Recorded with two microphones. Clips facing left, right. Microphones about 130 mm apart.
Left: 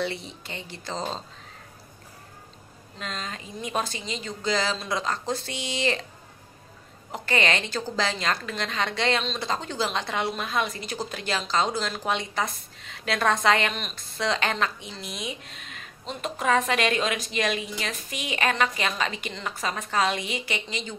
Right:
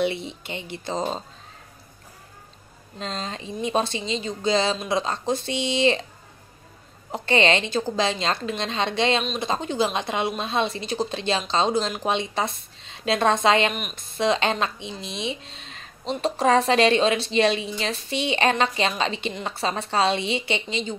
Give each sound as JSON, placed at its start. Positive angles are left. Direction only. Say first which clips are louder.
{"t": 0.0, "sound": "a woman's voice", "louder": "right 5 dB", "side_deg": -20}
{"t": 3.0, "sound": "a woman's voice", "louder": "right 4 dB", "side_deg": -30}
{"t": 7.1, "sound": "a woman's voice", "louder": "right 5 dB", "side_deg": -25}